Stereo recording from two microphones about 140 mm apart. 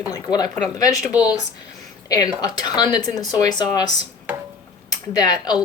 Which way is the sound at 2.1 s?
25° left (ahead or behind).